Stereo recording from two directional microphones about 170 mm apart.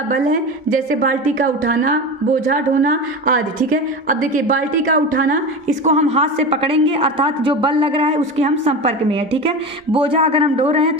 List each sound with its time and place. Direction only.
0.1 s a woman's voice: 50° right (ahead or behind)
5.8 s a woman's voice: 40° right (ahead or behind)